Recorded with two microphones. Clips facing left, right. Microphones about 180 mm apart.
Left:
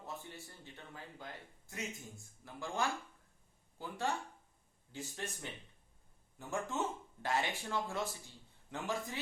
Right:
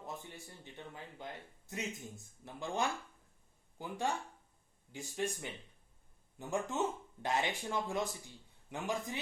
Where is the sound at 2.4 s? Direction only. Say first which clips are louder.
Right 1 dB; 20° right (ahead or behind).